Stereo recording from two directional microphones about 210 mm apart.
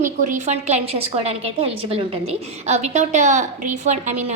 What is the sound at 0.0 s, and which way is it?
A woman's voice, 35° right (ahead or behind).